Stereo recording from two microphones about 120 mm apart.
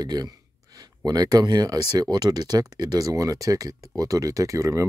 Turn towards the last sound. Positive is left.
turn(degrees=-25)  # may be behind; listen again after turning